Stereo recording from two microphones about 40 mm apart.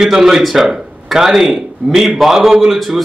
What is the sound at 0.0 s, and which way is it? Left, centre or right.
A man's voice, centre.